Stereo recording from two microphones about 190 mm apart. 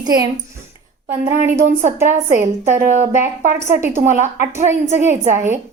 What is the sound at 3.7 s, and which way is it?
A woman's voice, 15° right (ahead or behind).